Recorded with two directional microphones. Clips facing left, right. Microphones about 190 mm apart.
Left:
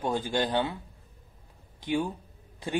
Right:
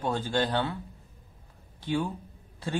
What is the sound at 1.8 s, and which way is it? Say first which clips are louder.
Speech: left 1 dB; 15° left (ahead or behind).